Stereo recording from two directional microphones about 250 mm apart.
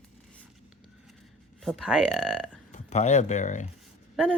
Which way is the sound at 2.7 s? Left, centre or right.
Left.